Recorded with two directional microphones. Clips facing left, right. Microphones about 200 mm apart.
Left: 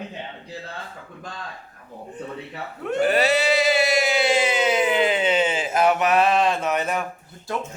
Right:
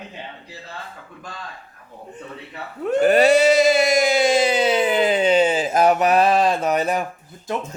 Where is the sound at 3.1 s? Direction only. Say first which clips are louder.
Right 7 dB; 45° right (ahead or behind).